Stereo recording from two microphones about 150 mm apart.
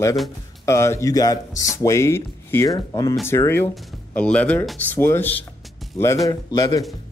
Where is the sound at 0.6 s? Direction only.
20° left (ahead or behind).